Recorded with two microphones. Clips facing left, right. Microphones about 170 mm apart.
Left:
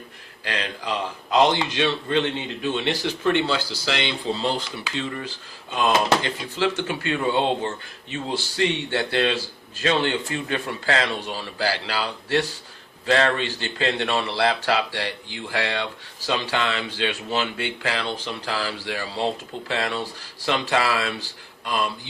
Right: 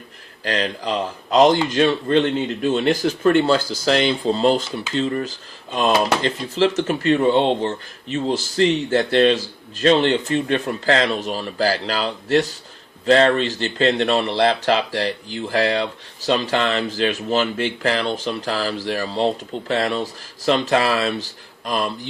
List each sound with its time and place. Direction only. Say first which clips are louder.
0.4 s speech: right 6 dB; 40° right (ahead or behind)
13.1 s speech: right 6 dB; 35° right (ahead or behind)